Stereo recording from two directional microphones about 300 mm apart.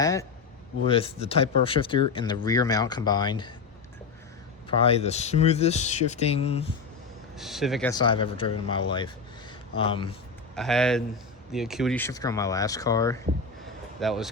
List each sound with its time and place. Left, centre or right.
0.0 s a sound: centre
0.9 s speech: centre
4.8 s speech: centre
7.3 s speech: centre
7.9 s speech: centre
10.5 s speech: centre
14.0 s speech: centre